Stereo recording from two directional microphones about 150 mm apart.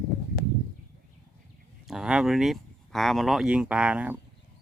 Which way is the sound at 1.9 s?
5° right (ahead or behind).